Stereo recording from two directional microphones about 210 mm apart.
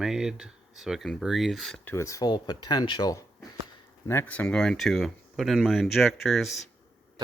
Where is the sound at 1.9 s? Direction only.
15° left (ahead or behind).